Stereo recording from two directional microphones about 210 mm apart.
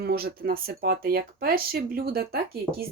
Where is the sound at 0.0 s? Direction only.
45° right (ahead or behind).